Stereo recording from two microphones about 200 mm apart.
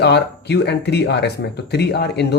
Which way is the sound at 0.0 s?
55° left (ahead or behind).